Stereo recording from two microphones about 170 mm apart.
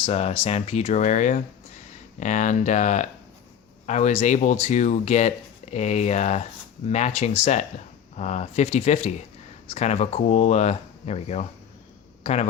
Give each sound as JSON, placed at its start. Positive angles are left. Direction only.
{"t": 0.0, "sound": "speech", "side_deg": 40}